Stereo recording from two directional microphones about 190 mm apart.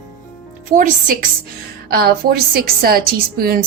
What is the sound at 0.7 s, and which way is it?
A woman's voice, 45° right (ahead or behind).